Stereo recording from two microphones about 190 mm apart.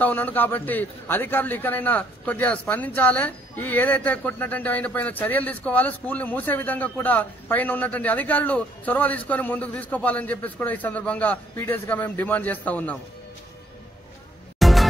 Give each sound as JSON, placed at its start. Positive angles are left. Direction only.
{"t": 0.0, "sound": "a man's voice", "side_deg": 10}
{"t": 14.6, "sound": "music", "side_deg": 0}